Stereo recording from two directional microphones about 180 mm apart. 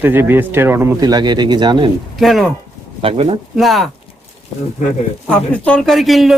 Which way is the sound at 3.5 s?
Centre (ahead or behind).